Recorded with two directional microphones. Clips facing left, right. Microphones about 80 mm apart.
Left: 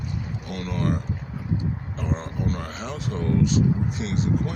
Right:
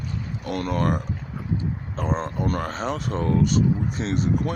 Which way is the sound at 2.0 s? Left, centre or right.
Right.